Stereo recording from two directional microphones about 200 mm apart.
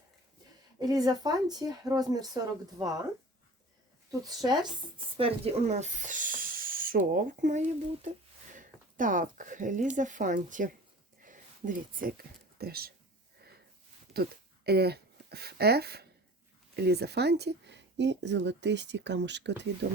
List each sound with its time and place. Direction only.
0.8 s speech: 20° right (ahead or behind)
4.1 s speech: 20° right (ahead or behind); by 12.9 s 50° right (ahead or behind)
14.1 s speech: 50° right (ahead or behind)